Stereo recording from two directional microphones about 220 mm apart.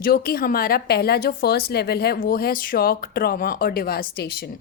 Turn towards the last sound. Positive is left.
turn(degrees=45)  # may be behind; listen again after turning